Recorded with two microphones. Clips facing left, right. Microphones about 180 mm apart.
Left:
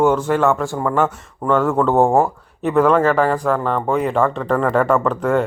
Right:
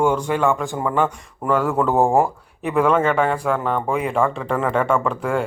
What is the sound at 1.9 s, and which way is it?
Speech, 15° right (ahead or behind).